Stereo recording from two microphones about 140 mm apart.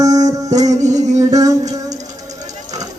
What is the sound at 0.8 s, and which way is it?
Music, 55° right (ahead or behind).